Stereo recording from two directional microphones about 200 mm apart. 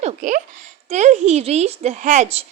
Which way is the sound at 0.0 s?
40° right (ahead or behind).